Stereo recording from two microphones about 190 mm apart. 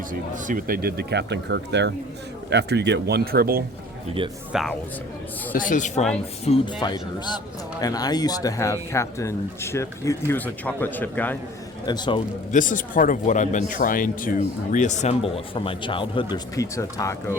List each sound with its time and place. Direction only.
0.1 s speech: 45° right (ahead or behind)
4.2 s speech: 25° right (ahead or behind)
4.5 s speech: centre (ahead or behind)
5.5 s speech: 45° left (ahead or behind)
6.7 s speech: 20° left (ahead or behind)
11.9 s a man's voice: 25° left (ahead or behind)
12.5 s speech: 45° left (ahead or behind); by 17.3 s 15° left (ahead or behind)